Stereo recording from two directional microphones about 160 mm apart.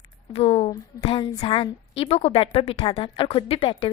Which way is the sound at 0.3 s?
40° left (ahead or behind).